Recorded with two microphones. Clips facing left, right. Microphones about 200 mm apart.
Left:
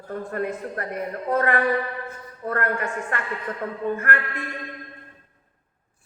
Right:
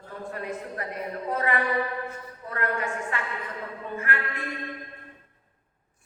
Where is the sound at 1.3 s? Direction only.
50° left (ahead or behind).